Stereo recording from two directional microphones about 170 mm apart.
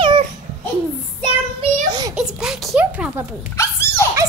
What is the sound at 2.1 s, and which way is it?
A child's voice, 5° right (ahead or behind).